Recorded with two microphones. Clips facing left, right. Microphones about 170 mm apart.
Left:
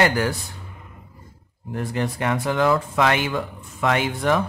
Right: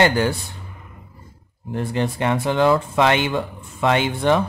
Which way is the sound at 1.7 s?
25° right (ahead or behind).